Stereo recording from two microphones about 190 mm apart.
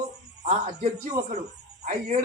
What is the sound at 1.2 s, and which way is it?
Speech, 55° right (ahead or behind).